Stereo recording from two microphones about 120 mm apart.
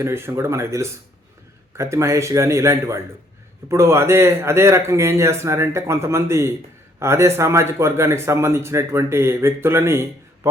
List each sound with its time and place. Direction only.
0.0 s a man's voice: 20° right (ahead or behind)